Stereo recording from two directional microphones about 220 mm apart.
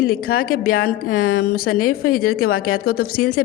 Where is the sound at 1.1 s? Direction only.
65° left (ahead or behind).